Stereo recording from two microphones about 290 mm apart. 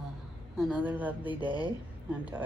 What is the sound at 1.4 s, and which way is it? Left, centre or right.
Speech, centre.